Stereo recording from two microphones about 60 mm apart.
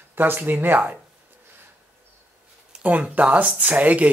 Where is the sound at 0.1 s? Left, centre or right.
Right.